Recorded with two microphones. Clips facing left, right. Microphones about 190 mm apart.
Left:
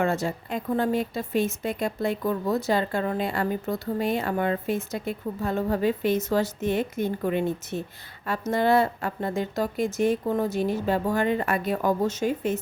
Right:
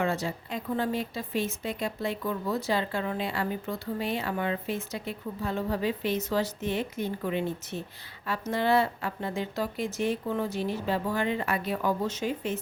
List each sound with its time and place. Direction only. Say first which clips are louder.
0.0 s a woman's voice: left 4 dB; 45° left (ahead or behind)